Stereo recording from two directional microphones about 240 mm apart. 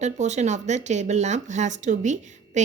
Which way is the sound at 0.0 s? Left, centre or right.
Right.